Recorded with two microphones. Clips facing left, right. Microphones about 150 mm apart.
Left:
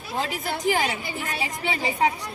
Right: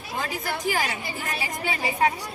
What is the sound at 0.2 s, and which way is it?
A woman's voice, 25° left (ahead or behind).